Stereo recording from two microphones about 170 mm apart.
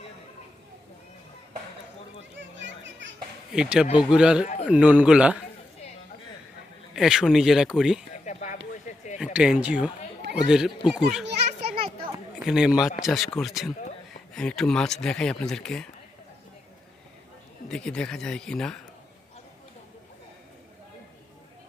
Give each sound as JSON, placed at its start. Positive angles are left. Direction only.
{"t": 2.6, "sound": "children playing", "side_deg": -90}
{"t": 3.5, "sound": "a man's voice", "side_deg": -5}
{"t": 6.9, "sound": "speech", "side_deg": -5}
{"t": 8.2, "sound": "a sound", "side_deg": 45}
{"t": 9.1, "sound": "speech", "side_deg": -5}
{"t": 12.5, "sound": "speech", "side_deg": -5}
{"t": 17.7, "sound": "speech", "side_deg": 5}